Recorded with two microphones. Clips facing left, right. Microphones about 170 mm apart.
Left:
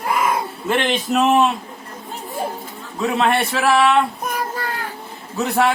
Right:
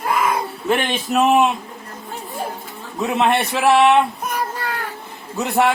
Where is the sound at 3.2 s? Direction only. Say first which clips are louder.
Right 1 dB; 20° right (ahead or behind).